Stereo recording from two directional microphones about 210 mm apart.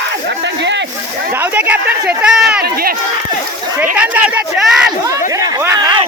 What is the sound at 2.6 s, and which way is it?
Speech, 45° right (ahead or behind).